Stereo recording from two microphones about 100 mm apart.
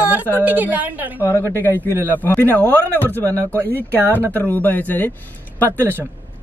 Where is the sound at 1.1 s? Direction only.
20° left (ahead or behind).